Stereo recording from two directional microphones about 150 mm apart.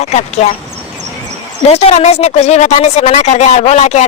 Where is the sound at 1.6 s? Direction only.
45° left (ahead or behind).